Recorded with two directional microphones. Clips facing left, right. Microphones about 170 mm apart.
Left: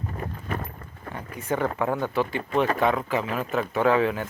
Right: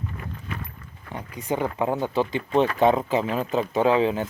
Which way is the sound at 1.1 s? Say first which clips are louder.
Right 1 dB; 15° right (ahead or behind).